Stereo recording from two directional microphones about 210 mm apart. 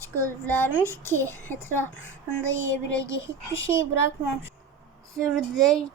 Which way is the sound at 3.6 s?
15° right (ahead or behind).